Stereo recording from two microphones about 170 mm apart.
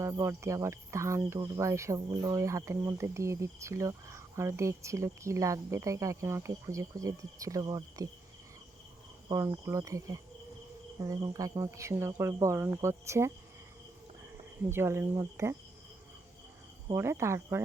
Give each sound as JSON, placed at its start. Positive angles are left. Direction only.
{"t": 0.0, "sound": "cricket", "side_deg": -15}
{"t": 9.3, "sound": "speech", "side_deg": -20}
{"t": 11.0, "sound": "cricket", "side_deg": -20}
{"t": 14.7, "sound": "cricket", "side_deg": -15}
{"t": 16.9, "sound": "cricket", "side_deg": -15}